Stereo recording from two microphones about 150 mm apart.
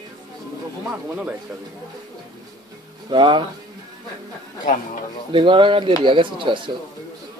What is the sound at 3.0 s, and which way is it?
Speech, 30° right (ahead or behind).